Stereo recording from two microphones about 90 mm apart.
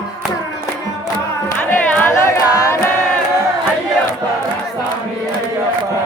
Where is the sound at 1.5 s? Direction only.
20° left (ahead or behind).